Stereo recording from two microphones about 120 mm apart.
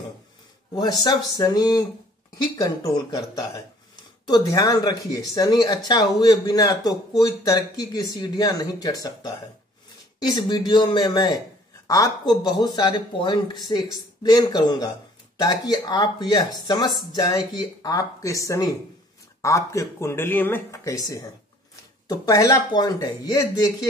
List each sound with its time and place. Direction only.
1.0 s speech: 35° left (ahead or behind)